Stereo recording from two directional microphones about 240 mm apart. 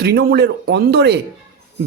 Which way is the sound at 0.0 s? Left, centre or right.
Right.